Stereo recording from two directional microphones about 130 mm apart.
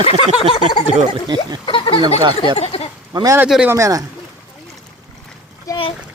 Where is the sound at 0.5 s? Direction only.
40° left (ahead or behind).